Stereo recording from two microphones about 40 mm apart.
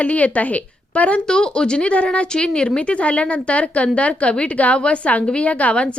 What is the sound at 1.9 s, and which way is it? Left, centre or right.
A woman's voice, left.